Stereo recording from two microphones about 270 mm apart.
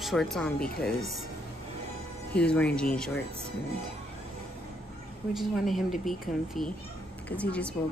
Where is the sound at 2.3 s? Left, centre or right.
Centre.